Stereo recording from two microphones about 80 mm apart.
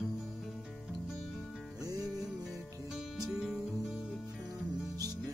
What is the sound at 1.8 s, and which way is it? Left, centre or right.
Music, right.